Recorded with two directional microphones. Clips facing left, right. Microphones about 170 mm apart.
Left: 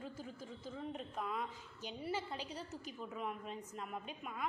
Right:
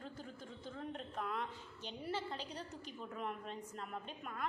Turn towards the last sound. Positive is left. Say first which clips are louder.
# left 1 dB
turn(degrees=5)  # may be behind; listen again after turning